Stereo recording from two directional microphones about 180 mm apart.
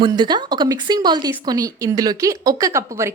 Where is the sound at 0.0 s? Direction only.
25° right (ahead or behind).